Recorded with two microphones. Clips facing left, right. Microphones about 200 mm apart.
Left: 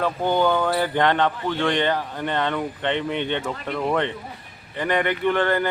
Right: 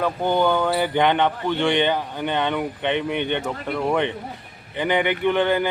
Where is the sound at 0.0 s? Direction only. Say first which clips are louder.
Even; 10° right (ahead or behind).